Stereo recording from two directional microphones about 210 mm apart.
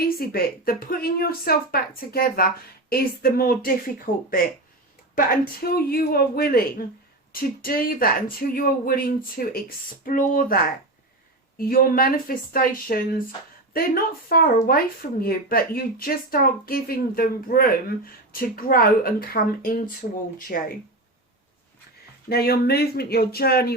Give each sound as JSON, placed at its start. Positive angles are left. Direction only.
{"t": 0.2, "sound": "speech", "side_deg": 45}
{"t": 22.3, "sound": "speech", "side_deg": 45}